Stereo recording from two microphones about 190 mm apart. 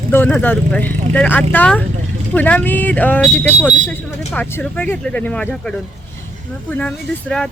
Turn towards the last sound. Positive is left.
turn(degrees=5)  # may be behind; listen again after turning